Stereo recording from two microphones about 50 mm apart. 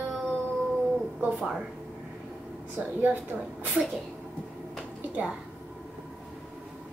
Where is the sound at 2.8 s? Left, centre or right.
Right.